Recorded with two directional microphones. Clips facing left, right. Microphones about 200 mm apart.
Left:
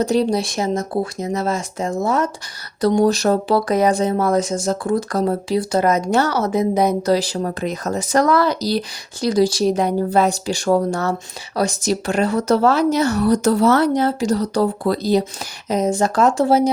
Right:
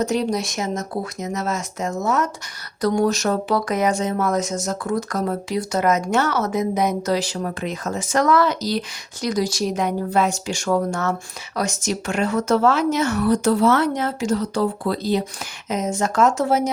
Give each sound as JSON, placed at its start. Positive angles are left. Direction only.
{"t": 0.0, "sound": "speech", "side_deg": 30}